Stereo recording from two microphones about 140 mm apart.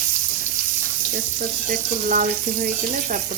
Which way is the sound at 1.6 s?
85° right.